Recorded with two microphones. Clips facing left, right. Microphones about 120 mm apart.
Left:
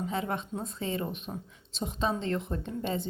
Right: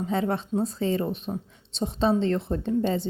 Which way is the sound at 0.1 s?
35° right (ahead or behind).